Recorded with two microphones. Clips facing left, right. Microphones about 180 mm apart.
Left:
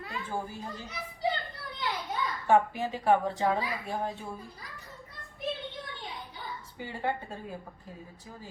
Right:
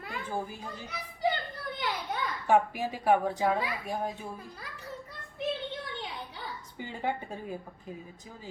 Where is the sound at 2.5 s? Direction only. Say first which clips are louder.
Left 1 dB; 15° right (ahead or behind).